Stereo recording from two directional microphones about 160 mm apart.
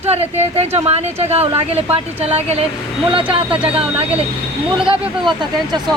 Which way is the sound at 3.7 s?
40° right (ahead or behind).